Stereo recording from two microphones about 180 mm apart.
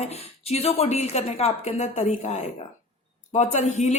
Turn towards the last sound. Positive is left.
turn(degrees=40)  # may be behind; listen again after turning